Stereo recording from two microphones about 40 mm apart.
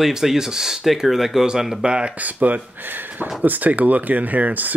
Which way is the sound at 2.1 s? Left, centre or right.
Right.